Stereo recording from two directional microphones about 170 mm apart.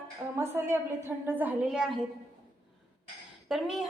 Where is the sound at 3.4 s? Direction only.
Centre (ahead or behind).